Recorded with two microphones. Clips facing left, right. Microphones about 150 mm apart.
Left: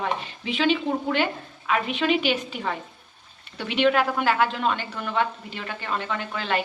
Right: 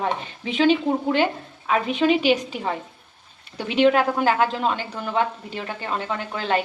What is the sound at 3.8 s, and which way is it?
Speech, 30° right (ahead or behind).